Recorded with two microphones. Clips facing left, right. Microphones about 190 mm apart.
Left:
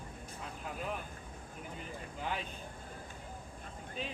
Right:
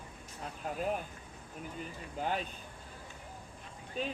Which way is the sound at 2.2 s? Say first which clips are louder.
Right 5 dB; 45° right (ahead or behind).